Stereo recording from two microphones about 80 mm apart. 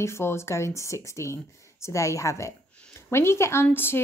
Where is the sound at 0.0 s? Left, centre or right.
Left.